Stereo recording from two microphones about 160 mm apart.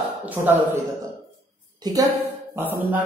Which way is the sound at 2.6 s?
10° right (ahead or behind).